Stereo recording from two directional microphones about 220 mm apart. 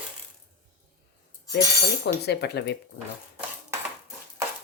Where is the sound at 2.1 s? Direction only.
50° left (ahead or behind).